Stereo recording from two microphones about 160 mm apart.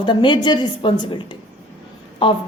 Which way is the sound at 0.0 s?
30° left (ahead or behind).